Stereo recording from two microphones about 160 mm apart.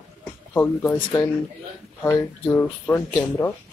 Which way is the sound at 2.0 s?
15° left (ahead or behind).